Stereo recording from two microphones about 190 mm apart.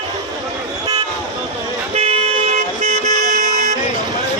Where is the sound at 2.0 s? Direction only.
35° right (ahead or behind).